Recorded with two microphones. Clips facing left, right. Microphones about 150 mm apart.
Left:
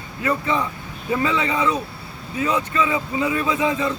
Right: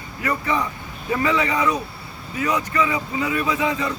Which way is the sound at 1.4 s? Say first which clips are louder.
Even; 20° left (ahead or behind).